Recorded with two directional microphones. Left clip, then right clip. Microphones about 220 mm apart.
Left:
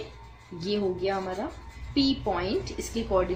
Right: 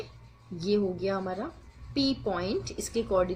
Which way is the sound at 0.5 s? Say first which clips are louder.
Even; 25° right (ahead or behind).